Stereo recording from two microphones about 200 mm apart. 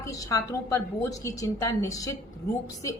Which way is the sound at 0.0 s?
15° left (ahead or behind).